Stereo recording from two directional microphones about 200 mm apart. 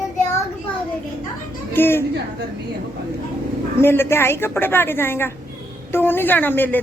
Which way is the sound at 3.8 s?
10° left (ahead or behind).